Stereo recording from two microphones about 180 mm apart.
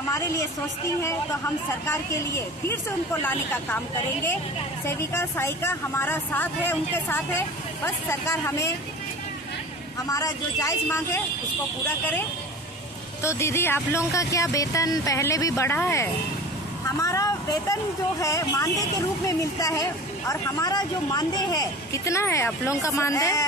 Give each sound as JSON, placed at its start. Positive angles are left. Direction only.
{"t": 1.9, "sound": "speech", "side_deg": 15}
{"t": 10.0, "sound": "speech", "side_deg": 20}
{"t": 13.2, "sound": "speech", "side_deg": 15}